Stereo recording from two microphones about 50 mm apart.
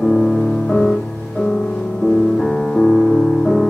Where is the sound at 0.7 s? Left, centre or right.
Centre.